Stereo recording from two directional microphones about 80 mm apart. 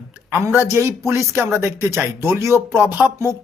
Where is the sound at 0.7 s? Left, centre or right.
Right.